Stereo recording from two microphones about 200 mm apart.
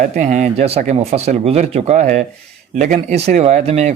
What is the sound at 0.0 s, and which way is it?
A man's voice, 40° right (ahead or behind).